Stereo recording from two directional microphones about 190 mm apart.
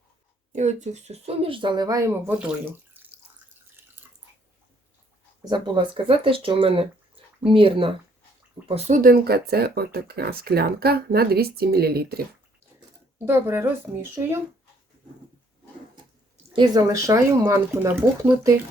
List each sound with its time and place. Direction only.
0.5 s speech: 40° right (ahead or behind); by 3.1 s 10° right (ahead or behind)
5.5 s speech: 25° right (ahead or behind)
8.9 s speech: 50° right (ahead or behind)
13.1 s speech: 10° right (ahead or behind)
16.5 s speech: 25° right (ahead or behind)